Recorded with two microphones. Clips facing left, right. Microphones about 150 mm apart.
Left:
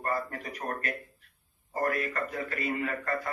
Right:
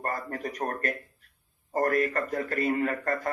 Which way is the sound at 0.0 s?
45° right (ahead or behind).